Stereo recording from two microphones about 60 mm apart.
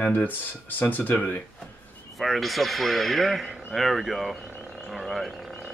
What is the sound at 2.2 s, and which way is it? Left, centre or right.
Speech, centre.